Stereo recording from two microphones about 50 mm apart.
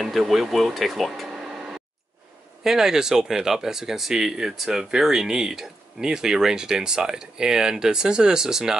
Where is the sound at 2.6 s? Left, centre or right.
Centre.